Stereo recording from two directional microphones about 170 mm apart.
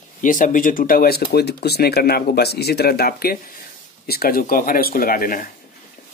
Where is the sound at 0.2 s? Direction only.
50° left (ahead or behind).